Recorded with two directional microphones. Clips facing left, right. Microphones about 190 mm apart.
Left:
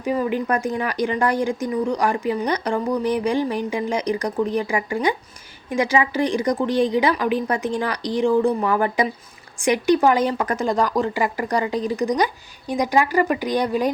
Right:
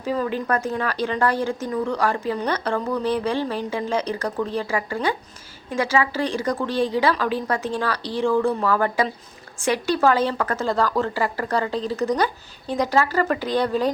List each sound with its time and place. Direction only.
0.0 s speech: 15° left (ahead or behind)